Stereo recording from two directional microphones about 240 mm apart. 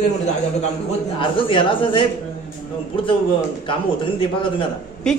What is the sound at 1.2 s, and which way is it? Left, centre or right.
Speech, left.